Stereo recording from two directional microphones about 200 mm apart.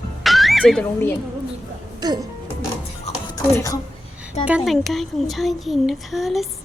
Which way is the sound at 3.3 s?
15° left (ahead or behind).